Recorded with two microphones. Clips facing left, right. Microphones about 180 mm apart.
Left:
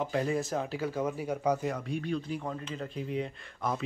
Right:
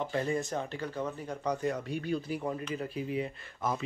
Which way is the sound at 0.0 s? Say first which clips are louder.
Left 1 dB; centre (ahead or behind).